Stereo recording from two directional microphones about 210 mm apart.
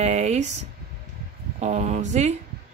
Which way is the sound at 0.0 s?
30° right (ahead or behind).